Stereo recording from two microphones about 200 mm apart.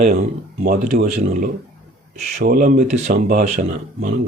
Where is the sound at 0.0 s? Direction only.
40° right (ahead or behind).